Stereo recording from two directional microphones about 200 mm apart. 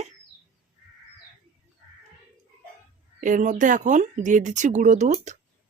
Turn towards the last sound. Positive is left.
turn(degrees=-35)  # may be behind; listen again after turning